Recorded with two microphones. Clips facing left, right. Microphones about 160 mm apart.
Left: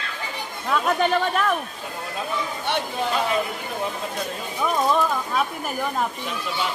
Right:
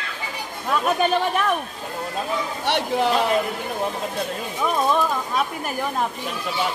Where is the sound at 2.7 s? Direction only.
80° right.